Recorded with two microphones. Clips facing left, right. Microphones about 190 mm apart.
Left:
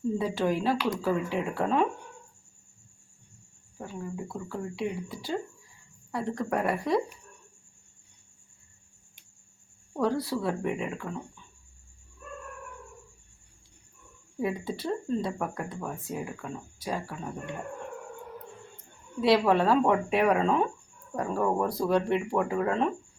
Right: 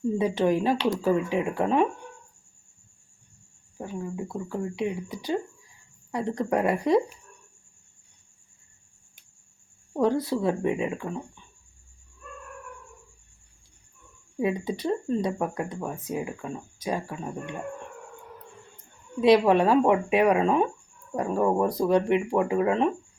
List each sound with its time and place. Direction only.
0.2 s speech: 20° right (ahead or behind)
3.8 s speech: 20° right (ahead or behind)
9.9 s speech: 20° right (ahead or behind)
14.3 s speech: 15° right (ahead or behind)
19.2 s speech: 20° right (ahead or behind)